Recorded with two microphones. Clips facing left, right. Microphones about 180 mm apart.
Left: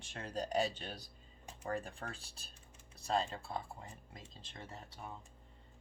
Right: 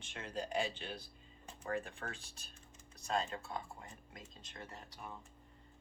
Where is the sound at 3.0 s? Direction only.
30° left (ahead or behind).